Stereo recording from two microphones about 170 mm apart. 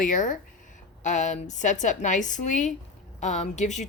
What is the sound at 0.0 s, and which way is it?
Speech, 50° left (ahead or behind).